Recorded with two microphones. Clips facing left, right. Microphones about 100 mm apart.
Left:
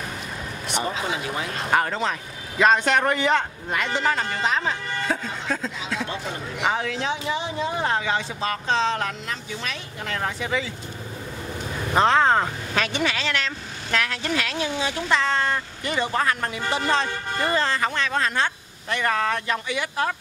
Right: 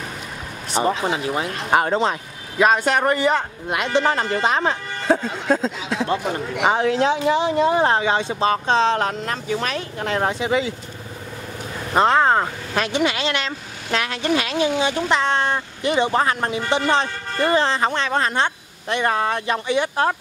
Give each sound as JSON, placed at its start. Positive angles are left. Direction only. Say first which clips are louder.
{"t": 0.7, "sound": "speech", "louder": "right 6 dB", "side_deg": -35}
{"t": 1.8, "sound": "speech", "louder": "right 7 dB", "side_deg": -20}
{"t": 2.6, "sound": "speech", "louder": "right 2 dB", "side_deg": -5}
{"t": 3.6, "sound": "speech", "louder": "right 4 dB", "side_deg": -15}
{"t": 7.0, "sound": "speech", "louder": "right 8 dB", "side_deg": -75}
{"t": 7.7, "sound": "speech", "louder": "right 7 dB", "side_deg": -45}
{"t": 8.0, "sound": "speech", "louder": "right 6 dB", "side_deg": -25}
{"t": 8.9, "sound": "speech", "louder": "right 6 dB", "side_deg": -45}
{"t": 9.5, "sound": "speech", "louder": "right 9 dB", "side_deg": -60}
{"t": 10.0, "sound": "speech", "louder": "right 6 dB", "side_deg": -30}
{"t": 10.4, "sound": "speech", "louder": "right 6 dB", "side_deg": -20}
{"t": 11.9, "sound": "speech", "louder": "right 2 dB", "side_deg": -5}